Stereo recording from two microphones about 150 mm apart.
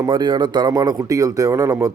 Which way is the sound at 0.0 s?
30° right (ahead or behind).